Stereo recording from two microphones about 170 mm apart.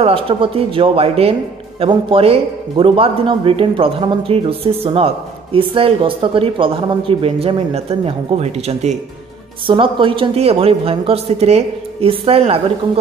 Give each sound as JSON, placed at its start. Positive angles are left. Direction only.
{"t": 0.0, "sound": "a man's voice", "side_deg": -30}